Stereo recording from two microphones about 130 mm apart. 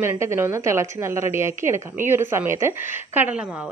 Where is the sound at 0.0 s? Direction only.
20° right (ahead or behind).